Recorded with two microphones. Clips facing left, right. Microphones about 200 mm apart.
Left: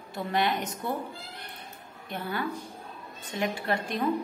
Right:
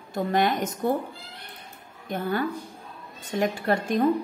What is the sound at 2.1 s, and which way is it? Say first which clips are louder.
A woman's voice: right 6 dB; 45° right (ahead or behind).